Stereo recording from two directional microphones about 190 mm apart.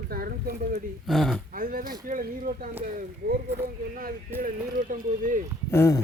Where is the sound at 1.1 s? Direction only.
Centre (ahead or behind).